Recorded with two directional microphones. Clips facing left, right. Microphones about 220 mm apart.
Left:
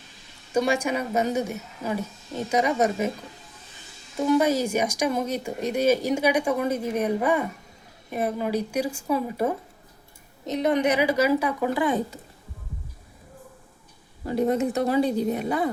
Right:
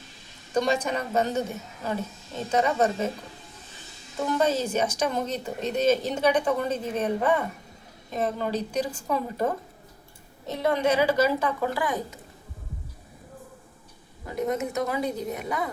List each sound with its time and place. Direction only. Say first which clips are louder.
0.5 s speech: left 2 dB; 10° left (ahead or behind)
4.2 s speech: left 4 dB; 10° left (ahead or behind); by 12.2 s 25° left (ahead or behind)
14.3 s a woman's voice: left 5 dB; 30° left (ahead or behind)